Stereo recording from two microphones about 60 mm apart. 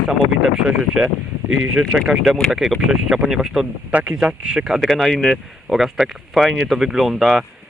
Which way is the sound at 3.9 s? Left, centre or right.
Right.